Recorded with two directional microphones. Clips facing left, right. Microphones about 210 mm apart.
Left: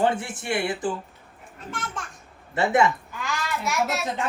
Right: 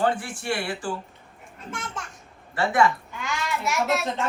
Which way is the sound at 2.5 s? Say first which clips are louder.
Left 1 dB; 20° left (ahead or behind).